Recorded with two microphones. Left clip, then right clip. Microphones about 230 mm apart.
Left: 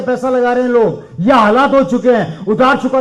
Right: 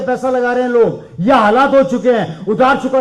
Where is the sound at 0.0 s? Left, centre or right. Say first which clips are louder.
Left 1 dB; left.